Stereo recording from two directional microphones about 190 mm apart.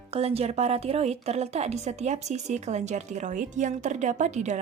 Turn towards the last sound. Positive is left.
turn(degrees=-35)  # may be behind; listen again after turning